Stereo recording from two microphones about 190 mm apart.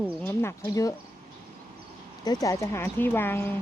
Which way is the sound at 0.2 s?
10° left (ahead or behind).